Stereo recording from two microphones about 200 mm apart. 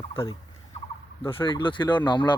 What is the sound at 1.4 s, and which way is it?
Speech, 25° left (ahead or behind).